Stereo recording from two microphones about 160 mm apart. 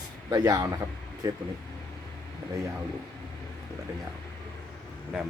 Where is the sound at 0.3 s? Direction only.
25° right (ahead or behind).